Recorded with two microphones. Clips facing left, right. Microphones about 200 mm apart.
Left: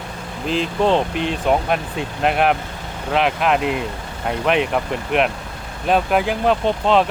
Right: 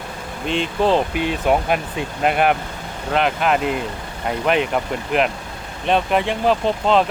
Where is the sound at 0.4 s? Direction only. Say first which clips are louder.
Left 1 dB; centre (ahead or behind).